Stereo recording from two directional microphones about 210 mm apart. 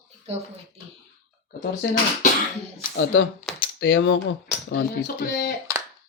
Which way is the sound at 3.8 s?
60° left (ahead or behind).